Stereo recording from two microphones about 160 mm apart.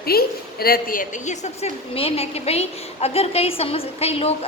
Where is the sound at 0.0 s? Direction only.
70° left (ahead or behind).